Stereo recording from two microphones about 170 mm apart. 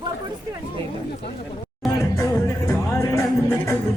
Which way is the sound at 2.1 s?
15° left (ahead or behind).